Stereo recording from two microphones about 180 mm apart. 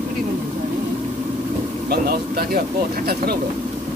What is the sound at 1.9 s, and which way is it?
Speech, 60° right (ahead or behind).